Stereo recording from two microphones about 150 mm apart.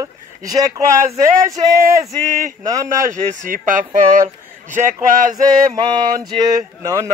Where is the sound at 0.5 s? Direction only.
25° right (ahead or behind).